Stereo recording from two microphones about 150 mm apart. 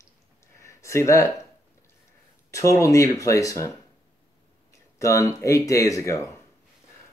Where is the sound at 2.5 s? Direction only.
20° left (ahead or behind).